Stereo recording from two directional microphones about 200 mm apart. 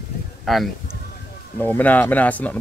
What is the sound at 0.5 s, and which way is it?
Speech, centre (ahead or behind).